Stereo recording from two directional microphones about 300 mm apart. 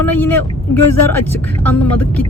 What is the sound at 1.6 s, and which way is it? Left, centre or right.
Speech, centre.